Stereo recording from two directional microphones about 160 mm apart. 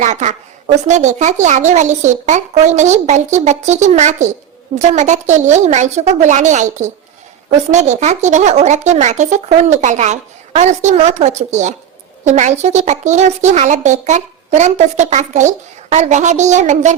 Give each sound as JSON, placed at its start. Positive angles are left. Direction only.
{"t": 0.0, "sound": "a woman's voice", "side_deg": -50}